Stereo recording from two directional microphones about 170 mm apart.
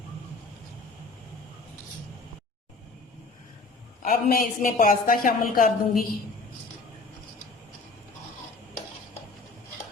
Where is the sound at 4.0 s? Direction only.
55° left (ahead or behind).